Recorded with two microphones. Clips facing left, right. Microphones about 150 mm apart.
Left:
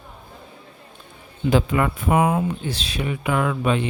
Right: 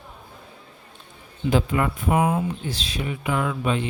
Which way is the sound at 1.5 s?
90° left.